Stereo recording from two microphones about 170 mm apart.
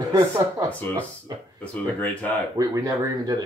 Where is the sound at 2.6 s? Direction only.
20° right (ahead or behind).